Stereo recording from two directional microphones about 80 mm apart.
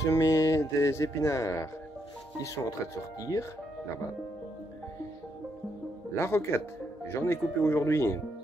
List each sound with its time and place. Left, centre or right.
0.0 s speech: left
3.2 s speech: left
6.1 s speech: left